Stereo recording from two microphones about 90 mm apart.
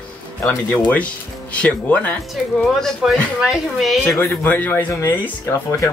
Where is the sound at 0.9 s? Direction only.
15° left (ahead or behind); by 4.2 s centre (ahead or behind).